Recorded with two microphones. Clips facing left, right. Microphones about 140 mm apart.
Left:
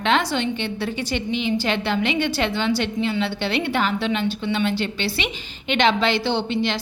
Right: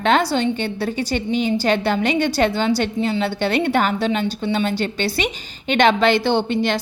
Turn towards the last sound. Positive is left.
turn(degrees=-50)  # may be behind; listen again after turning